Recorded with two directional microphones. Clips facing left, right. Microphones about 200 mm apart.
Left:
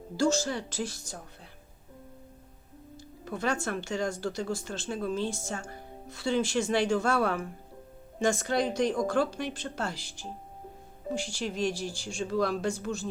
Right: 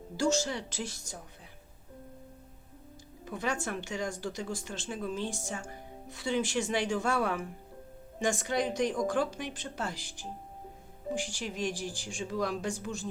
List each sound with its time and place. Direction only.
0.2 s a woman's voice: 20° right (ahead or behind)
3.2 s speech: 15° right (ahead or behind)